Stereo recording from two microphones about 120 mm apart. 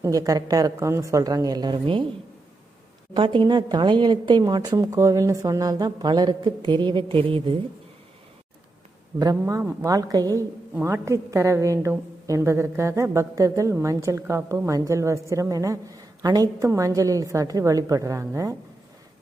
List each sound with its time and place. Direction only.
0.0 s a woman's voice: 30° right (ahead or behind)
3.2 s a woman's voice: 45° right (ahead or behind)
9.1 s a woman's voice: 30° right (ahead or behind)
10.8 s a woman's voice: 20° right (ahead or behind)